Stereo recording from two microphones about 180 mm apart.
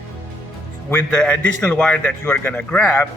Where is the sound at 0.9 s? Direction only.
5° left (ahead or behind).